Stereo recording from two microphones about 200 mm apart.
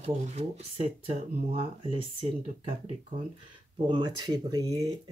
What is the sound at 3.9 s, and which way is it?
Speech, 20° right (ahead or behind).